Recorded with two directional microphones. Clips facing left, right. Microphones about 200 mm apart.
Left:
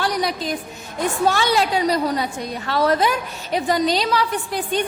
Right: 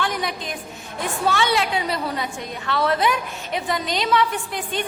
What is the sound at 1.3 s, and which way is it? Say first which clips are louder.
A woman's voice: right 1 dB; 40° left (ahead or behind).